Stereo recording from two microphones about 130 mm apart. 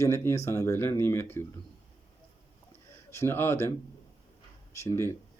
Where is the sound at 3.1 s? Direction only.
20° left (ahead or behind).